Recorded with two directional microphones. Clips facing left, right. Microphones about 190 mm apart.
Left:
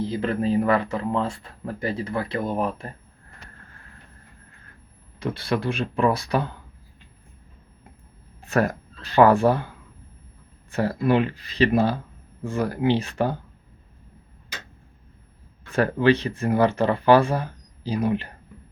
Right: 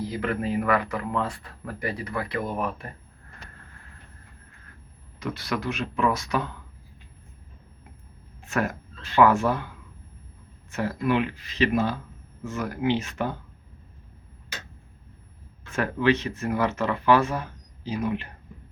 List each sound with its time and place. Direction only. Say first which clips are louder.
0.0 s speech: left 4 dB; 30° left (ahead or behind)
5.2 s speech: left 4 dB; 30° left (ahead or behind)
8.4 s speech: left 5 dB; 35° left (ahead or behind)
10.7 s speech: left 4 dB; 35° left (ahead or behind)
15.7 s speech: left 4 dB; 35° left (ahead or behind)